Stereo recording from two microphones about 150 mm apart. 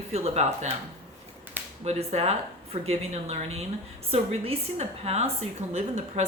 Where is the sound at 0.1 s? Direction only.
45° right (ahead or behind).